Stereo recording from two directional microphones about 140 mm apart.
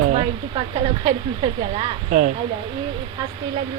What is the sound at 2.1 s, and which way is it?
Speech, 70° right (ahead or behind).